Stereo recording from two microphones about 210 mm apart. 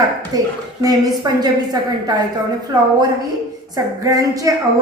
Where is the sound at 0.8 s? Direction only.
20° right (ahead or behind).